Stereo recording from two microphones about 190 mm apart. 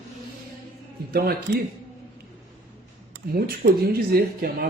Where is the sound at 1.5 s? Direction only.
50° right (ahead or behind).